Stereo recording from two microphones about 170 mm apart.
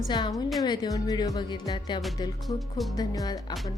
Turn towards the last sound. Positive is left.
turn(degrees=20)  # may be behind; listen again after turning